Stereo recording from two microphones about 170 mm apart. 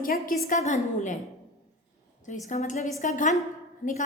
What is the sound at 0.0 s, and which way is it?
A woman's voice, 55° left (ahead or behind).